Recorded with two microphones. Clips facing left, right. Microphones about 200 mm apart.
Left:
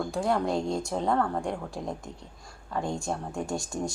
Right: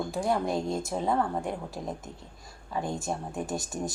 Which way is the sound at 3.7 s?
5° right (ahead or behind).